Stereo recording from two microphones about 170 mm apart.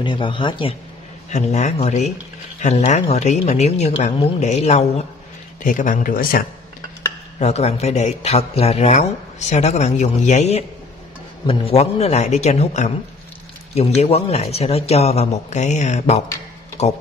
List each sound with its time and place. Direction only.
0.0 s speech: 30° left (ahead or behind)
1.3 s speech: 40° left (ahead or behind)
5.6 s speech: 50° left (ahead or behind)
7.3 s speech: 40° left (ahead or behind)